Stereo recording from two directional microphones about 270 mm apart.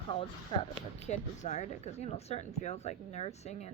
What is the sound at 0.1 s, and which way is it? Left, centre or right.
Speech, centre.